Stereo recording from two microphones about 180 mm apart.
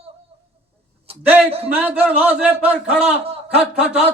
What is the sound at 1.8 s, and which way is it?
Speech, 10° right (ahead or behind).